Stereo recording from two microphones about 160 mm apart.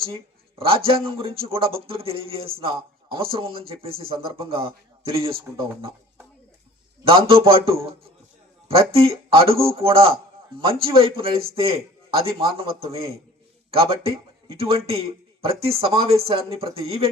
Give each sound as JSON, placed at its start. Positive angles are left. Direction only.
{"t": 0.9, "sound": "a man's voice", "side_deg": -35}
{"t": 7.0, "sound": "a man's voice", "side_deg": -35}